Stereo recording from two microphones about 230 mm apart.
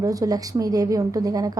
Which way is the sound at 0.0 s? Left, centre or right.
Centre.